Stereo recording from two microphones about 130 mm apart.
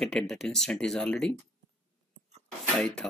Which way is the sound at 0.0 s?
5° left (ahead or behind).